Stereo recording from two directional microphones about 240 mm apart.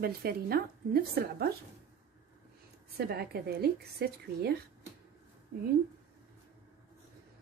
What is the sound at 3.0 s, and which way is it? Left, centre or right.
Speech, right.